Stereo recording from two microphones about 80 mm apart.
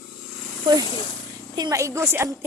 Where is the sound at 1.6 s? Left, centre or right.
Right.